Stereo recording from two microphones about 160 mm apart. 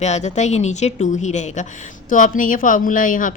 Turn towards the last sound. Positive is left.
turn(degrees=55)  # may be behind; listen again after turning